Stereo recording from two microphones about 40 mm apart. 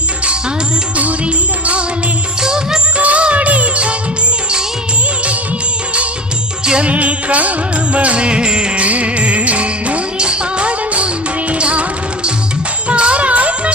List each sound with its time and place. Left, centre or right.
0.9 s music: right
2.4 s music: centre
3.0 s music: right
6.8 s music: right
8.8 s music: right